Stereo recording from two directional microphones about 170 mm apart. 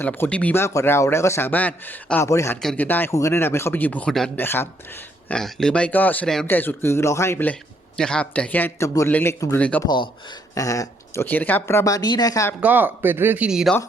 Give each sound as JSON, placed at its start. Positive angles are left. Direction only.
{"t": 0.0, "sound": "speech", "side_deg": 10}
{"t": 2.6, "sound": "speech", "side_deg": 5}
{"t": 9.8, "sound": "speech", "side_deg": 25}
{"t": 12.5, "sound": "speech", "side_deg": -10}